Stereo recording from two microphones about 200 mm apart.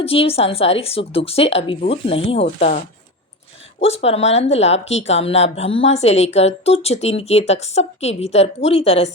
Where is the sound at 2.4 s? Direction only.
40° left (ahead or behind).